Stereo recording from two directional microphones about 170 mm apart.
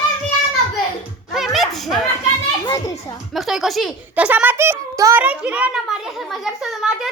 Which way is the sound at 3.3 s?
Centre (ahead or behind).